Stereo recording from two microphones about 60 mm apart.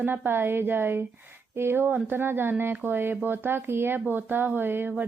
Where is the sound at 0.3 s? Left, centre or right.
Right.